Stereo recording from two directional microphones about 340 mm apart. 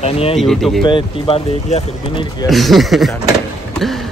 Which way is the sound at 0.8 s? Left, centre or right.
Centre.